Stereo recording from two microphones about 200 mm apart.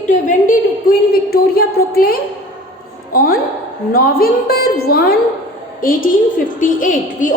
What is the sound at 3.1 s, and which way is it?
A woman's voice, 45° left (ahead or behind).